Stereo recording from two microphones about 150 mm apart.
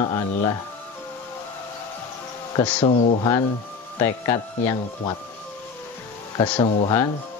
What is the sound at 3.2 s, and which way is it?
Speech, 25° left (ahead or behind).